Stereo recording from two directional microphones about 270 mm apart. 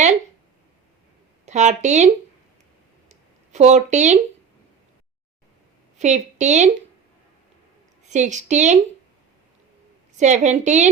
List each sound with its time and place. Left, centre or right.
1.5 s a woman's voice: right
3.1 s a sound: right
6.0 s a woman's voice: right
8.1 s a woman's voice: right
10.2 s a woman's voice: right